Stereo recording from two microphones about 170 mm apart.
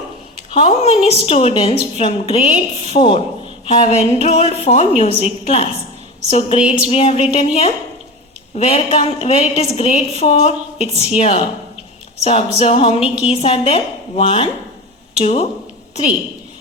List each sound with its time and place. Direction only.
0.6 s a woman's voice: 40° left (ahead or behind)